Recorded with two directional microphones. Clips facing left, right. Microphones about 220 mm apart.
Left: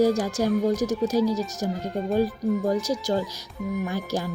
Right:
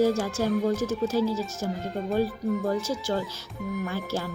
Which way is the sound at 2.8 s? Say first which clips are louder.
Left 3 dB; 15° left (ahead or behind).